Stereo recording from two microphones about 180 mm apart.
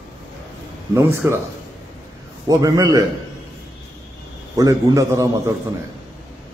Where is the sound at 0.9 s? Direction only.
15° right (ahead or behind).